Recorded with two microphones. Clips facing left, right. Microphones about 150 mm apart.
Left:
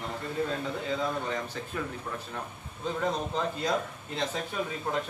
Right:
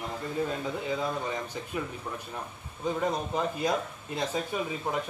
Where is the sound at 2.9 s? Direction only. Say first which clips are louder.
Even; 10° right (ahead or behind).